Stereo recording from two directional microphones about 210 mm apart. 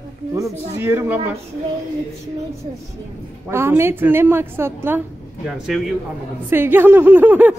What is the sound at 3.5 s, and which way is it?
Speech, 10° right (ahead or behind).